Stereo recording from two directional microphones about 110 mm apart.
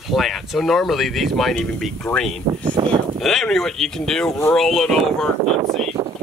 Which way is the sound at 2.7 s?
50° right (ahead or behind).